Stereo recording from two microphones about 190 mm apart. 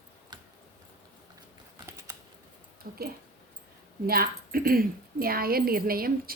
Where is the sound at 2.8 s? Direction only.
50° right (ahead or behind).